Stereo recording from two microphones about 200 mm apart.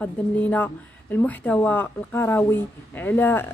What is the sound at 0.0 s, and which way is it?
Speech, 5° left (ahead or behind).